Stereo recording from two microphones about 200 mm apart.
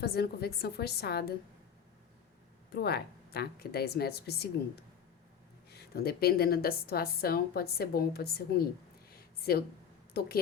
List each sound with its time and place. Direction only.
0.0 s a woman's voice: 50° left (ahead or behind)
2.7 s a woman's voice: 55° left (ahead or behind)
5.7 s a woman's voice: 50° left (ahead or behind)
9.0 s a sound: 50° left (ahead or behind)
10.2 s a woman's voice: 50° left (ahead or behind)